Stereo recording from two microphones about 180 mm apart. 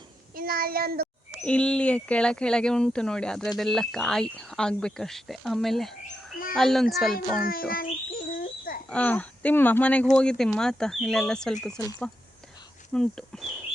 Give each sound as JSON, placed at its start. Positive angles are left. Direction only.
{"t": 0.3, "sound": "child singing", "side_deg": -55}
{"t": 1.5, "sound": "speech", "side_deg": 5}
{"t": 7.3, "sound": "speech", "side_deg": 55}
{"t": 8.3, "sound": "a sound", "side_deg": 55}
{"t": 8.9, "sound": "speech", "side_deg": 10}
{"t": 11.8, "sound": "speech", "side_deg": 20}
{"t": 12.9, "sound": "speech", "side_deg": 5}